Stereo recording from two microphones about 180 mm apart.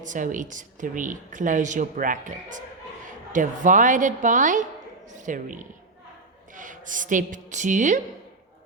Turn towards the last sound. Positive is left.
turn(degrees=-45)  # may be behind; listen again after turning